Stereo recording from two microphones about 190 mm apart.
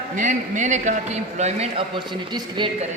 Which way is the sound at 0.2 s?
40° right (ahead or behind).